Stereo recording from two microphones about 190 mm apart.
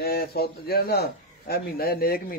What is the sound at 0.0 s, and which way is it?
A man's voice, 55° left (ahead or behind).